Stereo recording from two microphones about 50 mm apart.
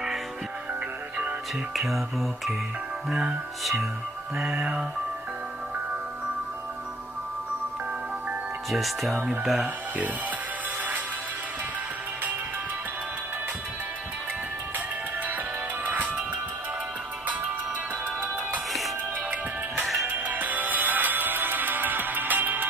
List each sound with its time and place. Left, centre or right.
1.8 s music: centre
4.6 s music: centre
8.6 s music: centre
15.2 s music: right
19.8 s music: centre
20.1 s music: right